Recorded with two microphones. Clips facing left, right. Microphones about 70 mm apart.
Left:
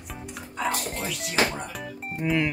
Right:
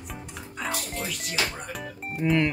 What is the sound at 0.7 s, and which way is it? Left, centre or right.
Music, left.